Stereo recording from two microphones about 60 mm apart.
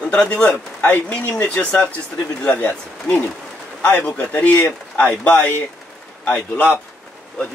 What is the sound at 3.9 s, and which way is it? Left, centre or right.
Speech, left.